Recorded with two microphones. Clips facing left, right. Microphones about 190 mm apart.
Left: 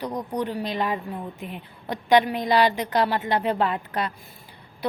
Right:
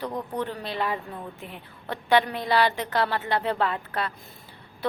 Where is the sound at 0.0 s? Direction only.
15° left (ahead or behind).